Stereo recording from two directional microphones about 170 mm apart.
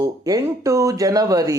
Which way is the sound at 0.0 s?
20° right (ahead or behind).